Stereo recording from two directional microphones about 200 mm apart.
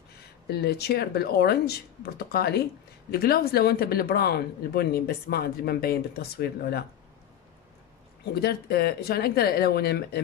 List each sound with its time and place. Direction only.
0.2 s speech: 55° left (ahead or behind)
8.4 s speech: 50° left (ahead or behind)